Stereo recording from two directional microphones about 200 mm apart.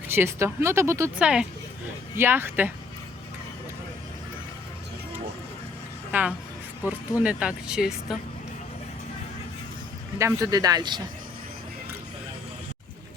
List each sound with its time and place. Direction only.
0.1 s speech: 10° right (ahead or behind)
6.1 s speech: 10° right (ahead or behind)
10.2 s a man's voice: 15° right (ahead or behind)